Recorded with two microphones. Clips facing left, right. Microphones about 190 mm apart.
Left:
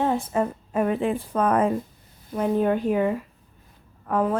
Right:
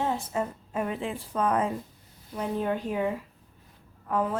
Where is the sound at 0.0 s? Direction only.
55° left (ahead or behind).